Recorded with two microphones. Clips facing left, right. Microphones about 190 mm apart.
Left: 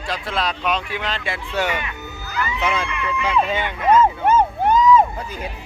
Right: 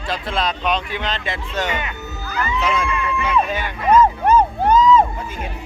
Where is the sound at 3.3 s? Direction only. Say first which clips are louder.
Left 1 dB; 25° left (ahead or behind).